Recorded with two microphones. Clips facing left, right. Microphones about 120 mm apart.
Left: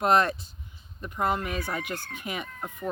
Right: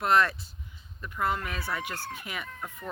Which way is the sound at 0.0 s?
20° left (ahead or behind).